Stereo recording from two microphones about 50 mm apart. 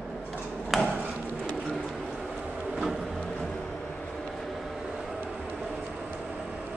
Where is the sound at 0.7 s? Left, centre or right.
Centre.